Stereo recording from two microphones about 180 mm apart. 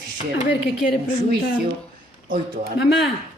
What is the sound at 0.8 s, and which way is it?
Speech, 50° left (ahead or behind).